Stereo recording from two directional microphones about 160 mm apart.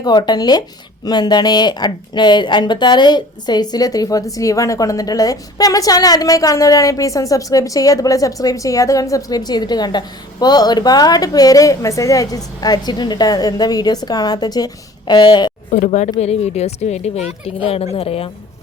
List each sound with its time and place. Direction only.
0.0 s speech: 25° left (ahead or behind)
15.7 s a woman's voice: 45° left (ahead or behind)